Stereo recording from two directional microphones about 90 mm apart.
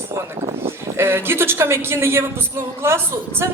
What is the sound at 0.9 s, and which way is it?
A woman's voice, 25° right (ahead or behind).